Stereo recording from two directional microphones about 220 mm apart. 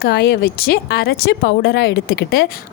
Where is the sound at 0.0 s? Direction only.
45° left (ahead or behind).